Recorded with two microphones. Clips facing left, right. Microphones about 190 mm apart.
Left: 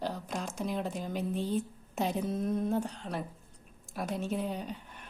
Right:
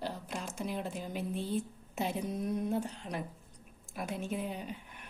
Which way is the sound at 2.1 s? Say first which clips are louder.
Left 3 dB; 10° right (ahead or behind).